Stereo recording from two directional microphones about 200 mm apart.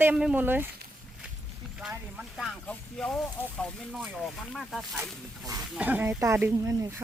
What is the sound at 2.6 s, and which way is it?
Speech, 5° left (ahead or behind).